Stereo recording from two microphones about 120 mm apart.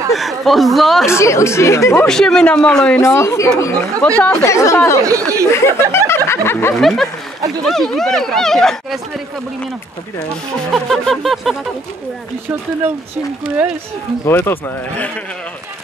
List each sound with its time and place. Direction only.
0.1 s speech: centre (ahead or behind)
1.0 s speech: 25° left (ahead or behind)
2.0 s speech: 5° left (ahead or behind)
3.0 s speech: 25° left (ahead or behind)
5.0 s speech: 25° right (ahead or behind)
5.5 s speech: 20° left (ahead or behind)
6.7 s speech: centre (ahead or behind)
10.7 s speech: centre (ahead or behind)
12.4 s speech: 15° right (ahead or behind)
14.2 s speech: 20° left (ahead or behind)